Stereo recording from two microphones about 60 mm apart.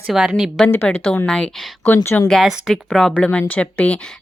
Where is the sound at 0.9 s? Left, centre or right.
Centre.